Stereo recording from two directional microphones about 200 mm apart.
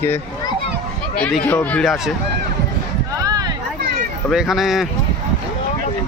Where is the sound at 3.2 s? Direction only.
20° right (ahead or behind).